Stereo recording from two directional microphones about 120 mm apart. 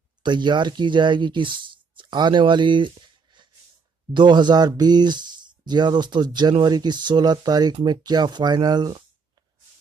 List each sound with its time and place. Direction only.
0.2 s speech: 40° right (ahead or behind)
4.1 s speech: 40° right (ahead or behind)